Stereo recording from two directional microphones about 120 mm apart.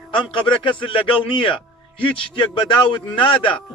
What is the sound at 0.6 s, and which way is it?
A man's voice, 45° left (ahead or behind).